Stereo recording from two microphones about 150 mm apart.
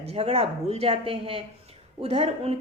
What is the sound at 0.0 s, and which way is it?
A woman's voice, 45° right (ahead or behind).